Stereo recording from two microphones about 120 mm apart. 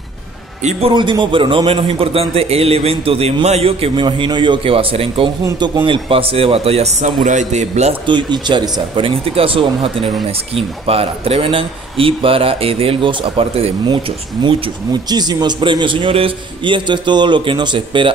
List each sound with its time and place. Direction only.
0.9 s speech: 40° right (ahead or behind); by 7.1 s 60° right (ahead or behind)
7.2 s a man's voice: 80° right
8.1 s speech: 40° right (ahead or behind)
15.0 s speech: 35° right (ahead or behind)